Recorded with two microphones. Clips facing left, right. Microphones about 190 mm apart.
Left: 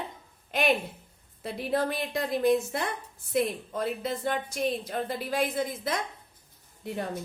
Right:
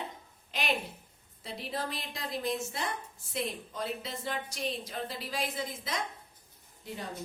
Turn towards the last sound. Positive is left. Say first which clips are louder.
# left 7 dB
turn(degrees=60)  # may be behind; listen again after turning